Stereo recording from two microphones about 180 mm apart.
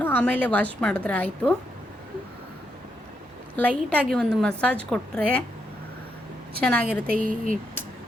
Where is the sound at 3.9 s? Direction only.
5° left (ahead or behind).